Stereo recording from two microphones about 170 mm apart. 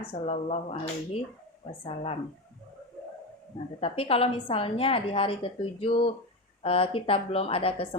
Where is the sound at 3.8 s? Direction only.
35° left (ahead or behind).